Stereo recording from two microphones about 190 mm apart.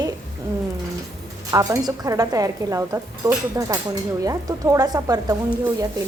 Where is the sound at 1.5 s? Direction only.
20° right (ahead or behind).